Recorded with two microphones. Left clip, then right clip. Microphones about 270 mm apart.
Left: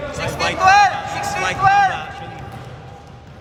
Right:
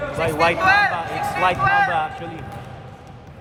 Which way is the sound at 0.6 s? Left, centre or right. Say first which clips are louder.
Left 7 dB; centre.